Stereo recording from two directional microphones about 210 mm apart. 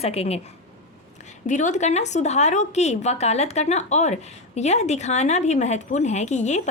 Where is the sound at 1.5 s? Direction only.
35° left (ahead or behind).